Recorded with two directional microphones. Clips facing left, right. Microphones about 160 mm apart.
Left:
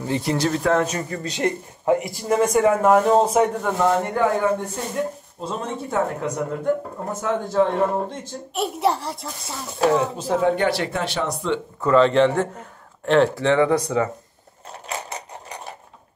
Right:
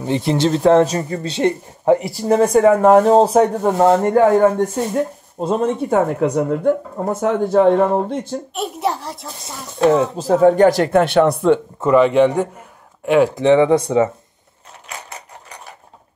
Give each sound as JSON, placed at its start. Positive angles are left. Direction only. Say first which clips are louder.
{"t": 0.0, "sound": "speech", "louder": "right 5 dB", "side_deg": -25}
{"t": 8.5, "sound": "a child's voice", "louder": "left 2 dB", "side_deg": 0}
{"t": 9.9, "sound": "speech", "louder": "right 6 dB", "side_deg": -35}
{"t": 11.8, "sound": "a man's voice", "louder": "right 2 dB", "side_deg": -15}